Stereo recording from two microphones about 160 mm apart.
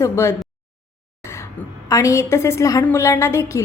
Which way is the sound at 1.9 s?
20° left (ahead or behind).